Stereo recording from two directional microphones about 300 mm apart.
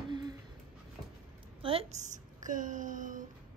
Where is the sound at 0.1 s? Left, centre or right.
Centre.